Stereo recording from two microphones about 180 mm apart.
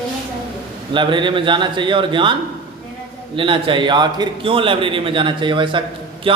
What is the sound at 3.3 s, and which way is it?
A man's voice, 30° right (ahead or behind).